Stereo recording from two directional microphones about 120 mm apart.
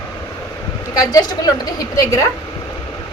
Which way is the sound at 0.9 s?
30° left (ahead or behind).